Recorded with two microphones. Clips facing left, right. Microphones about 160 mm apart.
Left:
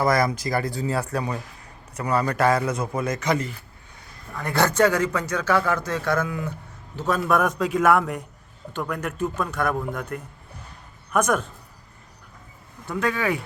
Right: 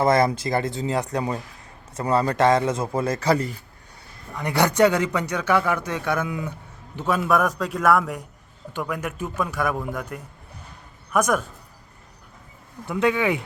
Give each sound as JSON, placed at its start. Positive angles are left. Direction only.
{"t": 0.0, "sound": "a man's voice", "side_deg": -25}
{"t": 4.4, "sound": "a man's voice", "side_deg": -15}
{"t": 7.3, "sound": "a man's voice", "side_deg": 0}
{"t": 12.9, "sound": "a man's voice", "side_deg": -20}